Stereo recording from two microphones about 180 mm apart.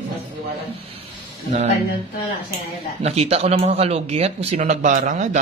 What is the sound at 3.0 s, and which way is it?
Speech, 35° right (ahead or behind).